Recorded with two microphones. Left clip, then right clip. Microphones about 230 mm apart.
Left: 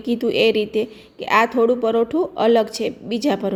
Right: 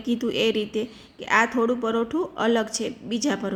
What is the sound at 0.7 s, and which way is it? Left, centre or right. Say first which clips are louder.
A woman's voice: left 7 dB; centre.